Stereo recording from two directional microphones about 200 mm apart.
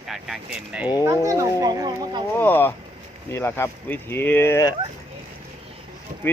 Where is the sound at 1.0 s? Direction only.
15° right (ahead or behind).